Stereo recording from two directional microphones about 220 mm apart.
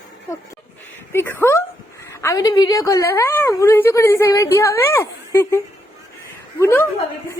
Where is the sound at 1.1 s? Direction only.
10° left (ahead or behind).